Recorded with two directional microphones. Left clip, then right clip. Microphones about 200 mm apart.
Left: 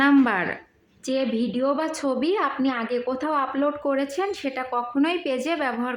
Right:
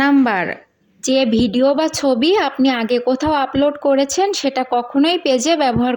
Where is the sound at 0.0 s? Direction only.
25° right (ahead or behind).